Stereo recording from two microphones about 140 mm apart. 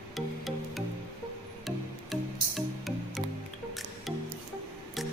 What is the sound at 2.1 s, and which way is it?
Music, centre (ahead or behind).